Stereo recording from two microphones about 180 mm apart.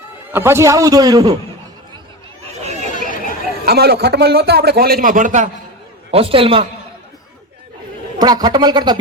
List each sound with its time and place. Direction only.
0.3 s a man's voice: 15° right (ahead or behind)
2.6 s chatter: 40° right (ahead or behind)
3.7 s a man's voice: 60° right (ahead or behind); by 5.5 s 45° right (ahead or behind)
6.1 s a man's voice: 30° right (ahead or behind)
8.2 s speech: 20° right (ahead or behind)